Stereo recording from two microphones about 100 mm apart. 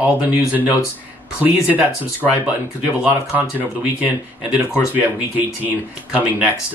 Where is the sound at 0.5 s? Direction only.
15° right (ahead or behind).